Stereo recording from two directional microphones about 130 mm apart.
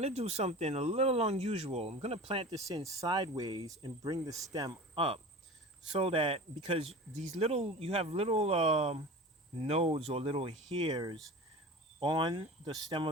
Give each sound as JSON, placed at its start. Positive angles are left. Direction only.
{"t": 0.0, "sound": "speech", "side_deg": -55}
{"t": 2.6, "sound": "speech", "side_deg": -25}
{"t": 3.8, "sound": "cricket", "side_deg": -35}
{"t": 4.9, "sound": "speech", "side_deg": -45}